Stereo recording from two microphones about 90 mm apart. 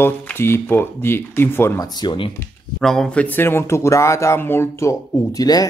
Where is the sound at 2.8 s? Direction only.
5° left (ahead or behind); by 5.7 s 45° left (ahead or behind).